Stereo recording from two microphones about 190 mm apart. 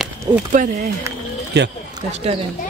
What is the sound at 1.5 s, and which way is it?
Speech, 65° right (ahead or behind).